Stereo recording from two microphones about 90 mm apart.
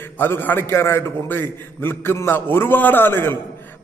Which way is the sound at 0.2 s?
25° left (ahead or behind).